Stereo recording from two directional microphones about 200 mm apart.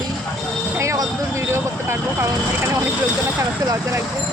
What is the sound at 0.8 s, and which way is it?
Vehicle, 15° right (ahead or behind).